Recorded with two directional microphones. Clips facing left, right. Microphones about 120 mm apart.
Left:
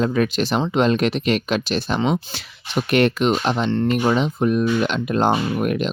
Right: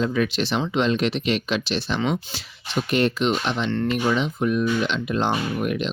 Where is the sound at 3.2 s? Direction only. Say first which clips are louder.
Left 4 dB; 40° left (ahead or behind).